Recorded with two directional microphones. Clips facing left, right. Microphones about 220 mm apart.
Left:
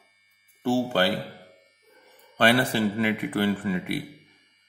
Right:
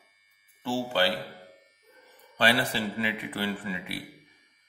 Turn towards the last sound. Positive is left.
turn(degrees=50)  # may be behind; listen again after turning